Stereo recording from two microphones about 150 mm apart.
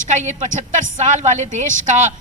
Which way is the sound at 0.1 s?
50° right (ahead or behind).